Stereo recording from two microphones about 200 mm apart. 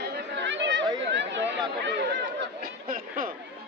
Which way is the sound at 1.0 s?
60° right (ahead or behind).